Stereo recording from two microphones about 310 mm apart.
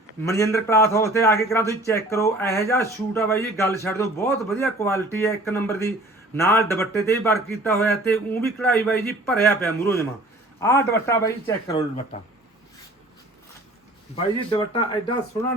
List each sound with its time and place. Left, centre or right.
0.2 s a man's voice: centre
14.2 s a man's voice: centre